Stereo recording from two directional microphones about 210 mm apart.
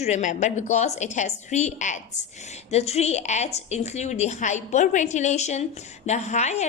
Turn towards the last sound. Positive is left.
turn(degrees=35)  # may be behind; listen again after turning